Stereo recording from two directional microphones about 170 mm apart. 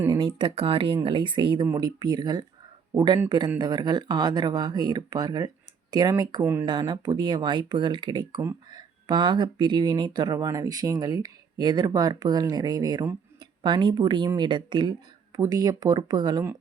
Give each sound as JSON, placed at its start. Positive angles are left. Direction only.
{"t": 0.1, "sound": "speech", "side_deg": -30}
{"t": 6.7, "sound": "speech", "side_deg": -25}